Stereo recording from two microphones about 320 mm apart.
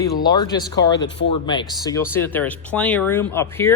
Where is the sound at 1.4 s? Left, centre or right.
Centre.